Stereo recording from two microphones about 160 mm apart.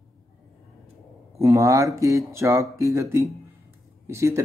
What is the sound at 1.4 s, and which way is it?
Speech, 20° right (ahead or behind).